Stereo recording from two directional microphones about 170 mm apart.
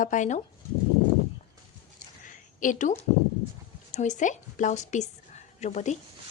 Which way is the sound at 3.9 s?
45° left (ahead or behind).